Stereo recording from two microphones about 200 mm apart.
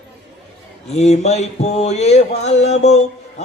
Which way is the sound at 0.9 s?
35° left (ahead or behind).